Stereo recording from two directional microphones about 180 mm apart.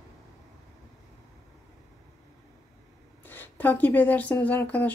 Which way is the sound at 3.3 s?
10° left (ahead or behind).